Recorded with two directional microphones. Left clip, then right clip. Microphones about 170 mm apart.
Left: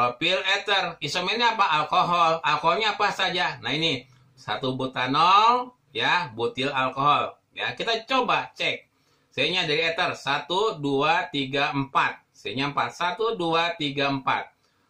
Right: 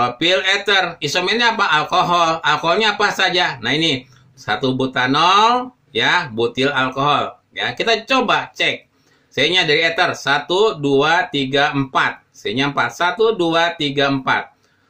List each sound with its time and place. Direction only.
0.0 s speech: 20° right (ahead or behind)